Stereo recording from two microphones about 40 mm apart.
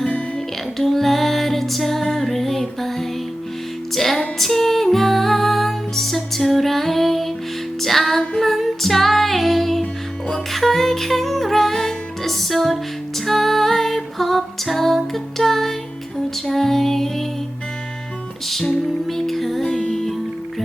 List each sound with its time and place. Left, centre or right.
0.8 s music: centre
18.4 s music: centre
19.6 s music: centre